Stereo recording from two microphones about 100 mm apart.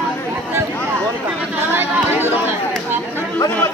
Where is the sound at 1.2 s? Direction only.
20° right (ahead or behind).